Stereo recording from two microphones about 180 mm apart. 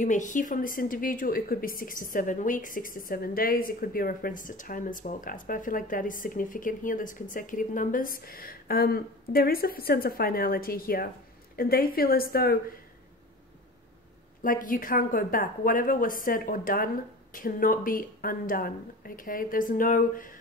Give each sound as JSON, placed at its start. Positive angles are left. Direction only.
{"t": 0.0, "sound": "a woman's voice", "side_deg": 45}
{"t": 14.4, "sound": "a woman's voice", "side_deg": 50}